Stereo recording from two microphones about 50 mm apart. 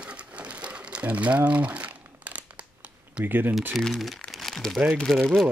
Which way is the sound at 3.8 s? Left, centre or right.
Centre.